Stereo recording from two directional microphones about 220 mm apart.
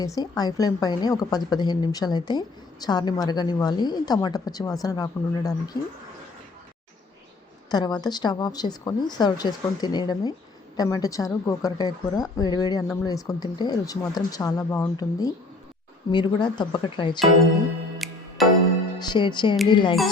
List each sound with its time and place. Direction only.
0.2 s a woman's voice: 15° left (ahead or behind)
7.7 s a woman's voice: 20° left (ahead or behind)
17.9 s music: centre (ahead or behind)
18.9 s speech: 20° left (ahead or behind)